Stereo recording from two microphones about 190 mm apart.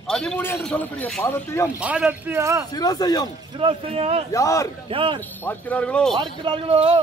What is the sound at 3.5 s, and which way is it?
Speech, 30° right (ahead or behind).